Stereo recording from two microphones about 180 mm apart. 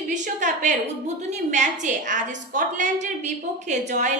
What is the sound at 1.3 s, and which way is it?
A woman's voice, 40° right (ahead or behind).